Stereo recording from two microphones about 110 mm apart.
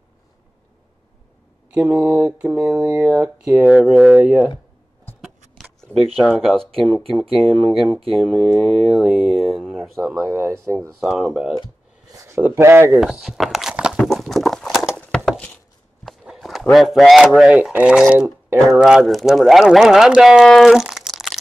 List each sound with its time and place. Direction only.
1.7 s mantra: 15° right (ahead or behind)
3.4 s speech: 5° right (ahead or behind)
4.1 s mantra: 10° right (ahead or behind)
6.1 s speech: centre (ahead or behind)
10.2 s speech: 20° right (ahead or behind)
11.0 s speech: 5° right (ahead or behind)
12.3 s speech: 20° right (ahead or behind)
12.9 s speech: 5° right (ahead or behind)
13.9 s clip-clop: centre (ahead or behind)
15.0 s a sound: 5° left (ahead or behind)
16.0 s walk: centre (ahead or behind)
16.7 s speech: centre (ahead or behind)